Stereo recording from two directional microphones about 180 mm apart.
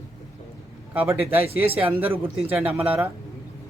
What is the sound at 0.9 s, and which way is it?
Speech, 10° right (ahead or behind).